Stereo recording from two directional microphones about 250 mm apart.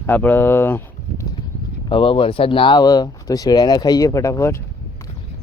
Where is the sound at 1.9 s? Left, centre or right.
Left.